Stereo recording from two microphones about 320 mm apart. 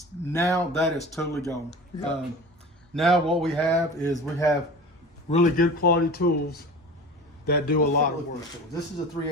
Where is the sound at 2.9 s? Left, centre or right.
Centre.